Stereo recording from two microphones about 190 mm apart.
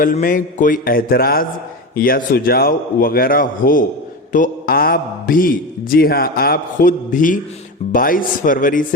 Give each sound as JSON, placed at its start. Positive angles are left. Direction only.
{"t": 0.0, "sound": "a man's voice", "side_deg": 45}